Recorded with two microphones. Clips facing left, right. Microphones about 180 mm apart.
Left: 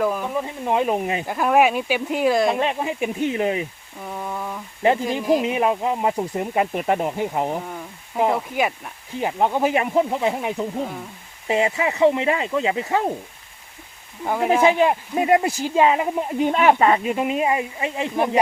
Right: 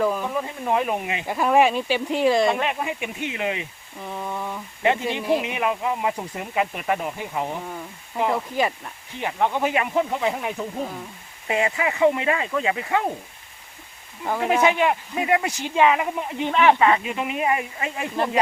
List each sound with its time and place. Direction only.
0.0 s speech: 5° left (ahead or behind)
0.7 s speech: 30° left (ahead or behind)
1.2 s speech: centre (ahead or behind)
2.6 s speech: 30° left (ahead or behind)
4.0 s speech: 5° left (ahead or behind)
4.8 s speech: 35° left (ahead or behind)
8.3 s speech: 5° left (ahead or behind)
9.1 s speech: 35° left (ahead or behind)
14.3 s speech: 10° left (ahead or behind)
14.6 s speech: 35° left (ahead or behind)